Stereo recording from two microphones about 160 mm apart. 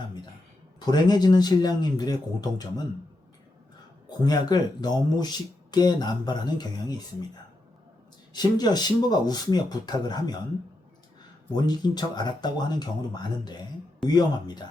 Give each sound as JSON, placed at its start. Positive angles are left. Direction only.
{"t": 0.8, "sound": "speech", "side_deg": 25}
{"t": 4.2, "sound": "speech", "side_deg": 25}
{"t": 8.3, "sound": "speech", "side_deg": 25}
{"t": 11.5, "sound": "speech", "side_deg": 25}